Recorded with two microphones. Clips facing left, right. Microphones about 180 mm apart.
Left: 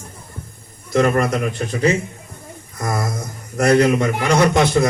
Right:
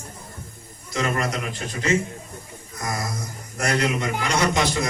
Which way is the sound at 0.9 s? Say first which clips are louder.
Left 9 dB; 55° left (ahead or behind).